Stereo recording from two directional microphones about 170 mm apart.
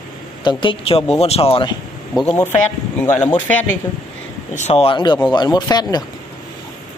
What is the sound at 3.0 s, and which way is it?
Speech, 10° left (ahead or behind).